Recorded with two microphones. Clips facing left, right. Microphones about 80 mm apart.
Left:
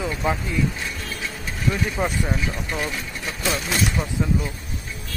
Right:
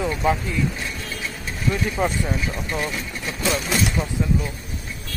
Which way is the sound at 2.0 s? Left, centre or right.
Centre.